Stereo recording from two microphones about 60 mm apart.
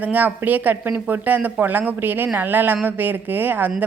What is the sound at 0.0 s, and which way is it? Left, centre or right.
A woman's voice, right.